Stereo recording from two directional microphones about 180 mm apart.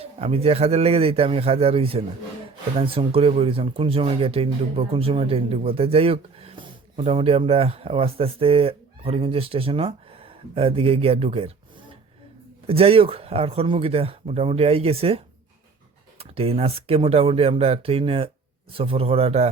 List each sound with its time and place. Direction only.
0.0 s speech: 35° right (ahead or behind)
12.6 s speech: 30° right (ahead or behind)